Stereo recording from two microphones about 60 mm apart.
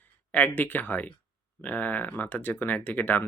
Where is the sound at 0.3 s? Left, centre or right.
Left.